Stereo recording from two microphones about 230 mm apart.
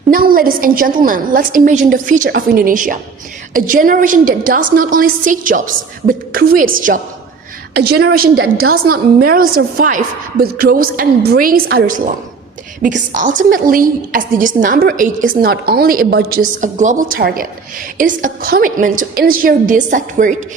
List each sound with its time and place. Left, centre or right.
0.1 s a woman's voice: right